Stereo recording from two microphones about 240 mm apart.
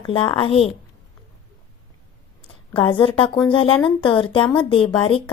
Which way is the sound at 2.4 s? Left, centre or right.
Left.